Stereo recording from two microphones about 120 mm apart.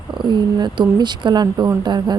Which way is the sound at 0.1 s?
40° right (ahead or behind).